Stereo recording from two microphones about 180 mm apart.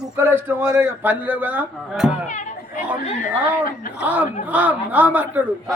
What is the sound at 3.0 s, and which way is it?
Speech, 35° left (ahead or behind).